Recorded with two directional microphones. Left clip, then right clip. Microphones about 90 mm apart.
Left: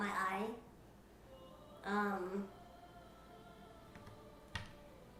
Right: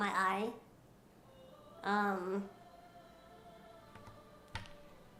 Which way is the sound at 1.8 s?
35° right (ahead or behind).